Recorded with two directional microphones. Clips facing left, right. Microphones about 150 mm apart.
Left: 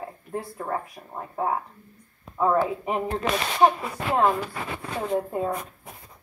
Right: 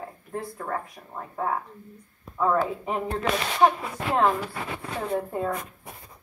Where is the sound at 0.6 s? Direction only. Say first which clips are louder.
Left 2 dB; 20° left (ahead or behind).